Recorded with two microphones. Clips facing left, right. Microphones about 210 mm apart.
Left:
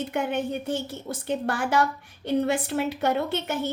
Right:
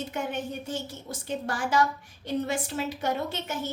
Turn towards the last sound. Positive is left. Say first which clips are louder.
# left 5 dB
turn(degrees=60)  # may be behind; listen again after turning